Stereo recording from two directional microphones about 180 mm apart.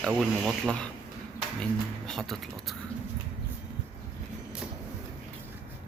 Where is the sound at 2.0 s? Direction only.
Centre (ahead or behind).